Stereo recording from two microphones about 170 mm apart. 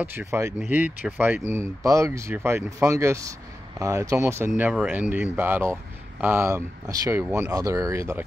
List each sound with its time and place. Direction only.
0.0 s speech: 10° right (ahead or behind)
4.6 s speech: 5° right (ahead or behind)